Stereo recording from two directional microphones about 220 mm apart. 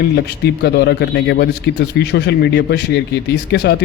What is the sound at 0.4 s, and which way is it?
A man's voice, 50° left (ahead or behind).